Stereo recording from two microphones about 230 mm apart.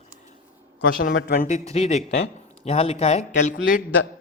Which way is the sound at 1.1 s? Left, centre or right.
Left.